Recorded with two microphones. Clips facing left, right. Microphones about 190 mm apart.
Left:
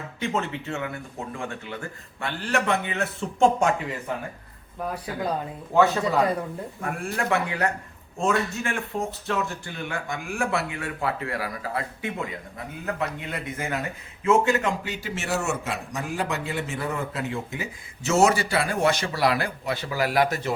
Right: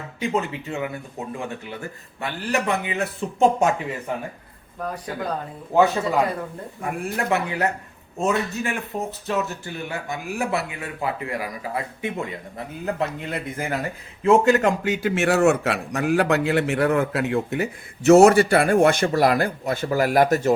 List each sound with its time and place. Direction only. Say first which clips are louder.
0.2 s a man's voice: right 3 dB; 15° right (ahead or behind)
2.2 s a man's voice: right 1 dB; 20° right (ahead or behind)
5.7 s a man's voice: right 2 dB; 20° right (ahead or behind)
12.8 s a man's voice: right 4 dB; 35° right (ahead or behind)